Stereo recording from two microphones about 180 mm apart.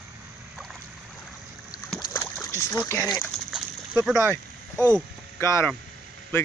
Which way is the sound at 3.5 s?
Centre (ahead or behind).